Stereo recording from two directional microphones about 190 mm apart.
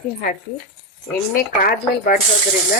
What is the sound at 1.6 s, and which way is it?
Speech, 50° left (ahead or behind).